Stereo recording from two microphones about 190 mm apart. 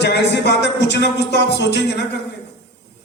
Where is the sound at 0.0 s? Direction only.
60° left (ahead or behind).